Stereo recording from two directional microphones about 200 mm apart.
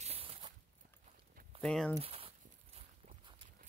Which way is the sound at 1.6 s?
5° left (ahead or behind).